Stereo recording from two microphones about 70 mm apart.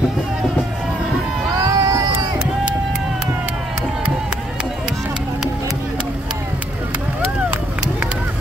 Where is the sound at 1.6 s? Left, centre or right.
Right.